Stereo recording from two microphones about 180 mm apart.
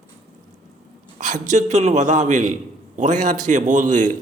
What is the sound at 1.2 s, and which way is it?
A man's voice, 45° right (ahead or behind).